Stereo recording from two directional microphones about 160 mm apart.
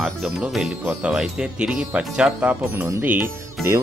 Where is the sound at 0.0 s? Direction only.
Centre (ahead or behind).